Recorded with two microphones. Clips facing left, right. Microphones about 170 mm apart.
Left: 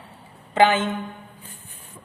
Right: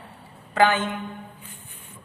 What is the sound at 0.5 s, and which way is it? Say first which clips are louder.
Speech: left 2 dB; 20° left (ahead or behind).